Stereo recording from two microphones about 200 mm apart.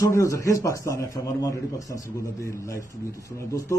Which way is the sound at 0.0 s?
15° left (ahead or behind).